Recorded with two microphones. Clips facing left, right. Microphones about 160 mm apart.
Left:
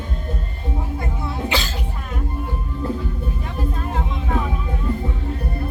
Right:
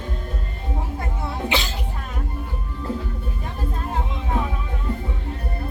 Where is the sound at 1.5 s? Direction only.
20° right (ahead or behind).